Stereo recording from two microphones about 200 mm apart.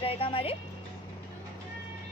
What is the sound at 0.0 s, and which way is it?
Speech, 25° left (ahead or behind).